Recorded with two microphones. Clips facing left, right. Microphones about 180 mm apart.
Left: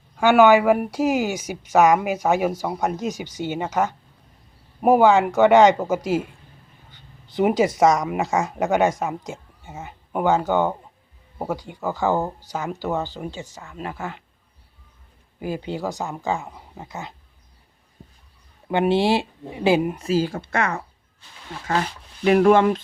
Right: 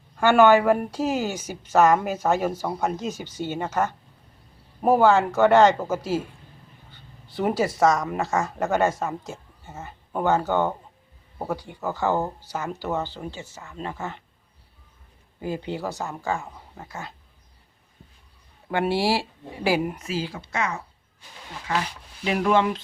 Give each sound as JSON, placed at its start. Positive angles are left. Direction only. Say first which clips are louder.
{"t": 0.2, "sound": "a woman's voice", "louder": "left 2 dB", "side_deg": 10}
{"t": 15.4, "sound": "speech", "louder": "left 2 dB", "side_deg": 15}
{"t": 18.7, "sound": "speech", "louder": "left 4 dB", "side_deg": 20}
{"t": 20.1, "sound": "speech", "louder": "left 8 dB", "side_deg": 45}